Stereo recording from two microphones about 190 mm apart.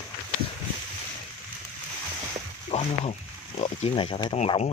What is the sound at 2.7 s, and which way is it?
Speech, 35° left (ahead or behind).